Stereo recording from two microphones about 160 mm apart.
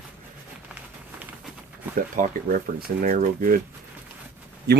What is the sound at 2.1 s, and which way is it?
Speech, 55° right (ahead or behind).